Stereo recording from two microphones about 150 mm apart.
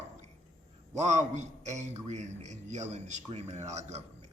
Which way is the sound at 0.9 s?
50° right (ahead or behind).